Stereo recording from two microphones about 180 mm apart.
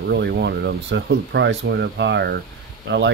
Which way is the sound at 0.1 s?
70° right (ahead or behind).